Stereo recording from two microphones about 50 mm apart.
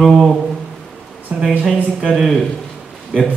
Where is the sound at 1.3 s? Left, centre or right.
Right.